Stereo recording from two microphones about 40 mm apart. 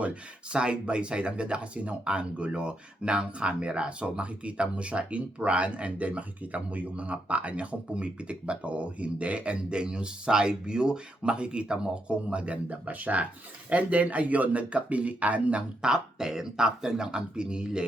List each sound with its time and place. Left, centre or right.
0.0 s speech: right
15.8 s speech: centre